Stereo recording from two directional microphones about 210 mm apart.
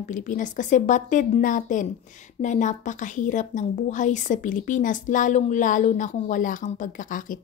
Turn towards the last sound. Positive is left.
turn(degrees=40)  # may be behind; listen again after turning